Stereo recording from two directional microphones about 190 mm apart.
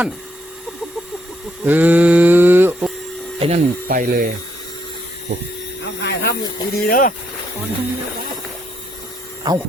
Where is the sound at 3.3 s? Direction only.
35° right (ahead or behind).